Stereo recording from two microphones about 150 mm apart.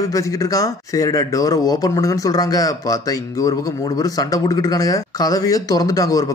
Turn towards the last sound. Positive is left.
turn(degrees=25)  # may be behind; listen again after turning